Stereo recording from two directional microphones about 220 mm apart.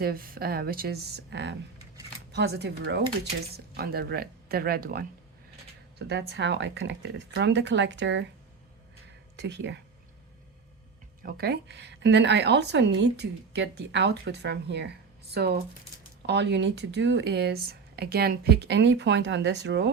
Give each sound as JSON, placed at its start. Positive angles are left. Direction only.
{"t": 0.0, "sound": "a woman's voice", "side_deg": -40}
{"t": 9.3, "sound": "a woman's voice", "side_deg": -50}
{"t": 11.2, "sound": "a woman's voice", "side_deg": -45}